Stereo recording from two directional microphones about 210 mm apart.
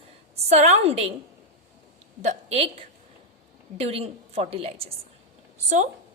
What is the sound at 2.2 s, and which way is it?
A woman's voice, 30° right (ahead or behind).